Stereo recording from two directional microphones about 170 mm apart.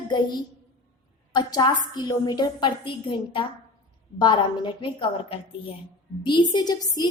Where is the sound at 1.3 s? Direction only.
25° left (ahead or behind).